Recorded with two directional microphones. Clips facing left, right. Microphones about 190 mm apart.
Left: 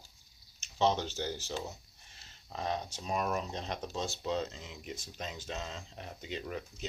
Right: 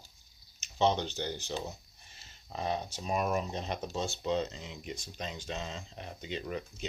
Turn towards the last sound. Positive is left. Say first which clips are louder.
# right 2 dB
turn(degrees=0)  # may be behind; listen again after turning